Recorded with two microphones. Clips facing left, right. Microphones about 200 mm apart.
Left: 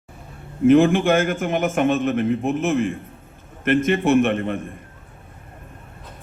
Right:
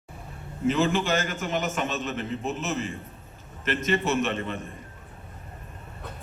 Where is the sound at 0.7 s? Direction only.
55° left (ahead or behind).